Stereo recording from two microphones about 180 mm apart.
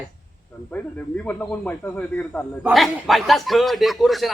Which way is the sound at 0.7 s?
10° left (ahead or behind).